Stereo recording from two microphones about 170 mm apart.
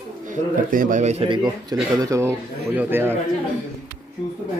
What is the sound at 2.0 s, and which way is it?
Speech, 15° right (ahead or behind).